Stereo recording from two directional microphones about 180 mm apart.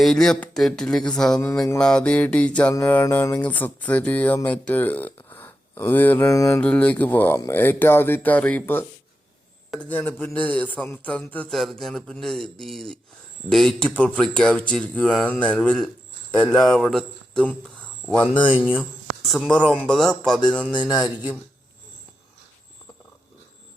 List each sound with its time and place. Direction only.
0.0 s a man's voice: centre (ahead or behind); by 6.6 s 15° left (ahead or behind)
6.6 s speech: 5° left (ahead or behind)
9.9 s a man's voice: 10° left (ahead or behind)
18.7 s a sound: 5° left (ahead or behind)
19.9 s a man's voice: 5° left (ahead or behind)
20.7 s speech: 20° left (ahead or behind)